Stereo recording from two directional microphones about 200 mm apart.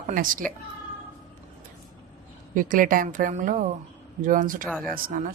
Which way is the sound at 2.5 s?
40° right (ahead or behind).